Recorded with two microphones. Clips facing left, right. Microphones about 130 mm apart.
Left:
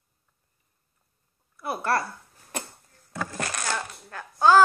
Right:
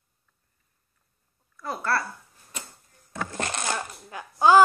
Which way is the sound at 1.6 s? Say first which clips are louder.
Left 2 dB; 15° left (ahead or behind).